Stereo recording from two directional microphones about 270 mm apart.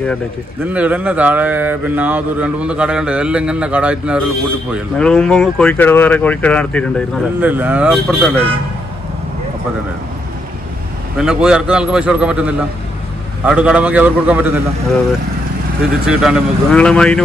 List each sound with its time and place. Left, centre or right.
0.7 s speech: centre
7.3 s speech: centre
11.1 s speech: centre
16.1 s speech: centre